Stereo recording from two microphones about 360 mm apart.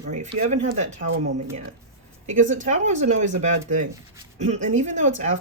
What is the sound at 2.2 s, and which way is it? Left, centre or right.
Speech, centre.